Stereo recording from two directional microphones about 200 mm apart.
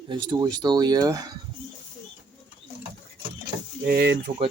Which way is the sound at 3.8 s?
55° right (ahead or behind).